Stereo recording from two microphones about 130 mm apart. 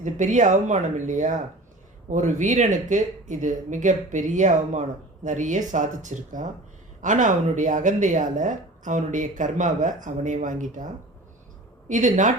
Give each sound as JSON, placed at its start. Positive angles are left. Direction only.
{"t": 0.0, "sound": "speech", "side_deg": -75}
{"t": 11.9, "sound": "speech", "side_deg": -70}